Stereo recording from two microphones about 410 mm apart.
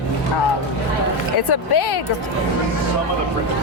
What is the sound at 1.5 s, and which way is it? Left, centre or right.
Speech, left.